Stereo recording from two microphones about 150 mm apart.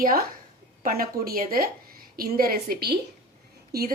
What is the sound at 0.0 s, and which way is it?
A woman's voice, 75° right (ahead or behind).